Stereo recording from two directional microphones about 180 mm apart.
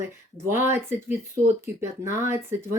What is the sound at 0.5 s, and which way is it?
Speech, 15° right (ahead or behind).